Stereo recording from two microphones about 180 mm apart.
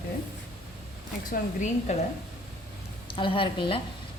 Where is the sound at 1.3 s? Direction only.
45° left (ahead or behind).